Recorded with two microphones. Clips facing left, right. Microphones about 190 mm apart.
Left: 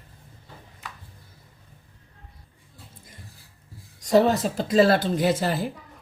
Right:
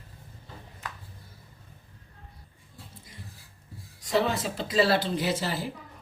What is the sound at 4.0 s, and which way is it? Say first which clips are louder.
Speech: left 7 dB; 40° left (ahead or behind).